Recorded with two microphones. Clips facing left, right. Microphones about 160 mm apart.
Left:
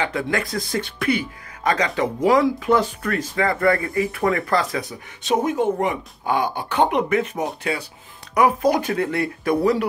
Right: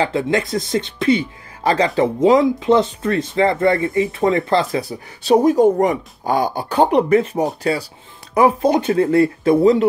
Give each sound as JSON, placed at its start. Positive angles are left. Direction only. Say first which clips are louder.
{"t": 0.0, "sound": "speech", "louder": "right 5 dB", "side_deg": -25}